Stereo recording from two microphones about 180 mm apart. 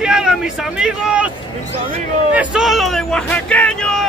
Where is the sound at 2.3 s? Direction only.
5° right (ahead or behind).